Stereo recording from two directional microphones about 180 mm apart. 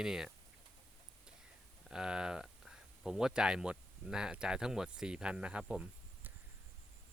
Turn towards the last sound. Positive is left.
turn(degrees=-5)  # may be behind; listen again after turning